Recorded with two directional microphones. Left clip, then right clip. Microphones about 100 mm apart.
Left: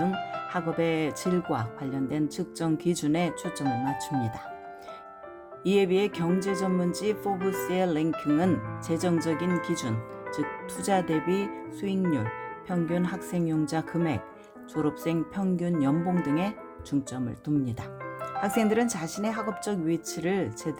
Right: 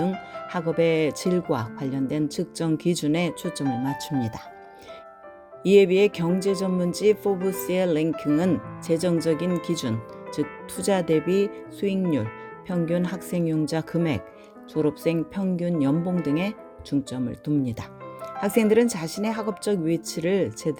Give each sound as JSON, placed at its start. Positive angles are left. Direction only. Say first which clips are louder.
{"t": 0.0, "sound": "music", "louder": "even", "side_deg": -30}
{"t": 0.8, "sound": "speech", "louder": "right 8 dB", "side_deg": -35}
{"t": 4.1, "sound": "speech", "louder": "right 4 dB", "side_deg": 0}
{"t": 5.6, "sound": "speech", "louder": "right 7 dB", "side_deg": -35}
{"t": 14.7, "sound": "speech", "louder": "right 5 dB", "side_deg": -20}